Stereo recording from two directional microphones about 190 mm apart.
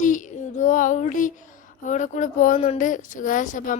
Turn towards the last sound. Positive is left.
turn(degrees=45)  # may be behind; listen again after turning